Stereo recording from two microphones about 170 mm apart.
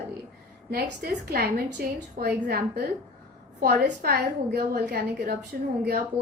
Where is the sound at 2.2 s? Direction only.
80° right.